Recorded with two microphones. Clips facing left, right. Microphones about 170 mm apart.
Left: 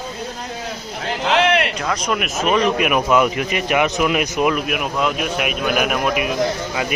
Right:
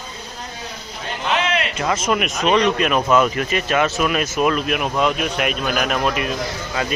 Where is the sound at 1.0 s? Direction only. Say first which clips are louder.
Left 5 dB; 75° left (ahead or behind).